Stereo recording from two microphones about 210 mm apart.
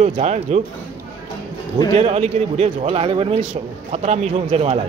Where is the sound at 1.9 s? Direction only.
30° right (ahead or behind).